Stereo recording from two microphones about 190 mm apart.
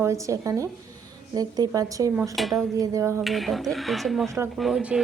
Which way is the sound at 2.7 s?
15° right (ahead or behind).